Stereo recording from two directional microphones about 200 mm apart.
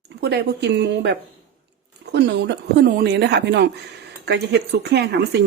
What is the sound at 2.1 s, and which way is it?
Speech, 60° right (ahead or behind).